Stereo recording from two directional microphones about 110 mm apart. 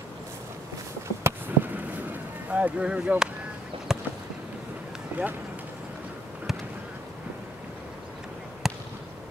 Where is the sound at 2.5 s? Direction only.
10° right (ahead or behind).